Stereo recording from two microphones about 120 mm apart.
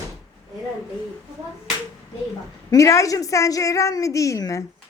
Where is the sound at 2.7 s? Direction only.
25° left (ahead or behind).